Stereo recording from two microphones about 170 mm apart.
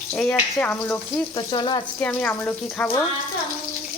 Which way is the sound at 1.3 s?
25° left (ahead or behind).